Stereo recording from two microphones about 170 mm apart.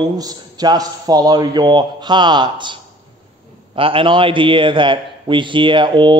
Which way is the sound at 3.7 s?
30° right (ahead or behind).